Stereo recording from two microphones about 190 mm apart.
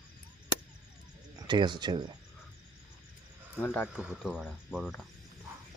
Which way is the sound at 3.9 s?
Centre (ahead or behind).